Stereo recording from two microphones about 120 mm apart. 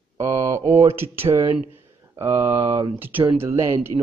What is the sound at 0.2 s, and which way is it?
Speech, 25° right (ahead or behind).